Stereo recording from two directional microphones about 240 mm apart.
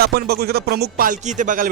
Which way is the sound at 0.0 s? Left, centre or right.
Right.